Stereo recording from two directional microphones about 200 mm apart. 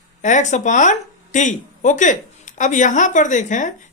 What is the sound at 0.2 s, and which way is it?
A woman's voice, 35° left (ahead or behind).